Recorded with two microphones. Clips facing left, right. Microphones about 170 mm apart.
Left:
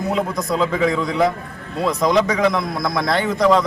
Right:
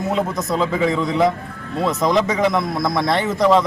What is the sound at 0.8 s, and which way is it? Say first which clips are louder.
Speech: even; 25° right (ahead or behind).